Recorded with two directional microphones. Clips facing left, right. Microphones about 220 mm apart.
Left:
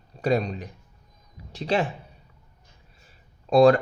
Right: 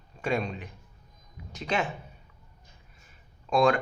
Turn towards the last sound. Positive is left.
turn(degrees=35)  # may be behind; listen again after turning